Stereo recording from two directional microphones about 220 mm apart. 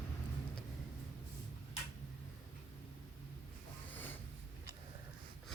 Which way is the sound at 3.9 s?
10° left (ahead or behind).